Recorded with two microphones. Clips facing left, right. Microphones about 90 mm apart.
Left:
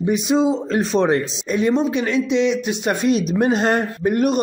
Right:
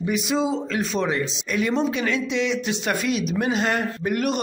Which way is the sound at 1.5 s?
25° left (ahead or behind).